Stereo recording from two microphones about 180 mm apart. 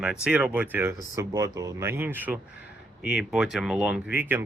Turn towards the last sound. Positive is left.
turn(degrees=-10)  # may be behind; listen again after turning